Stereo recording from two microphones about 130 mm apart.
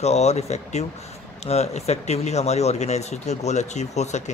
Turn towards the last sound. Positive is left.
turn(degrees=60)  # may be behind; listen again after turning